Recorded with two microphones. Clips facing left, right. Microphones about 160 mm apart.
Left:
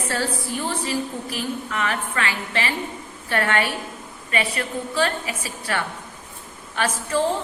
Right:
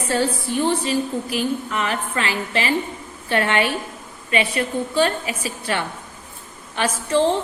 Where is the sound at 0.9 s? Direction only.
20° right (ahead or behind).